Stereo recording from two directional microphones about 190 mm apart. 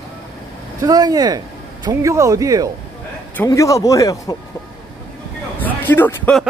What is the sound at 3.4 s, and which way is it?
Speech, 15° left (ahead or behind).